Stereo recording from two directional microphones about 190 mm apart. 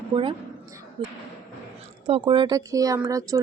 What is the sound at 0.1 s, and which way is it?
A woman's voice, 25° right (ahead or behind).